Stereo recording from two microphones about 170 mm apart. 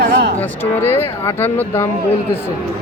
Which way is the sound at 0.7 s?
15° left (ahead or behind).